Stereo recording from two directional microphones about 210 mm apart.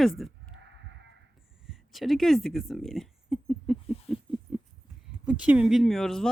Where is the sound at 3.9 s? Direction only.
30° left (ahead or behind).